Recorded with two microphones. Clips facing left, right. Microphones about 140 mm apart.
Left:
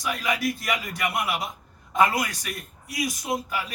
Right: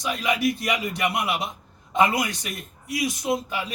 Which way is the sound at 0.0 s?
20° right (ahead or behind).